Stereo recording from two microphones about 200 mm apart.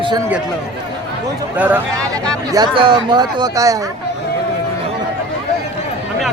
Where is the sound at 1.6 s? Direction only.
10° right (ahead or behind).